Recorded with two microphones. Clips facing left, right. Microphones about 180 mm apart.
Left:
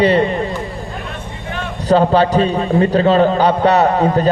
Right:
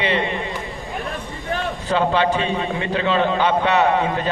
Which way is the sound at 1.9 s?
40° left (ahead or behind).